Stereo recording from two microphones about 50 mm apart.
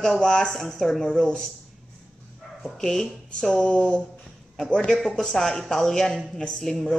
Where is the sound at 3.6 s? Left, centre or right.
Left.